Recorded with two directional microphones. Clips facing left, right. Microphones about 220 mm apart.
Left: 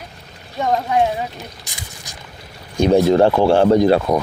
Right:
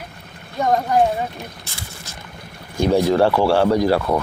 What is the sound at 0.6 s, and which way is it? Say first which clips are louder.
Speech: right 1 dB; centre (ahead or behind).